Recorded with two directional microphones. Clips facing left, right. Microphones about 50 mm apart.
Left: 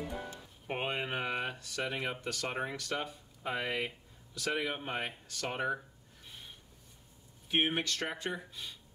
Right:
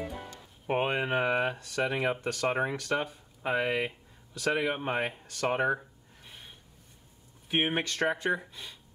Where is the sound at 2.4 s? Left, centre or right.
Right.